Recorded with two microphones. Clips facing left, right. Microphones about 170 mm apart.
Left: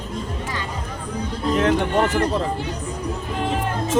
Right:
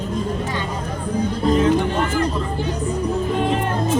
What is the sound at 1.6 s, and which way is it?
Speech, 70° left (ahead or behind).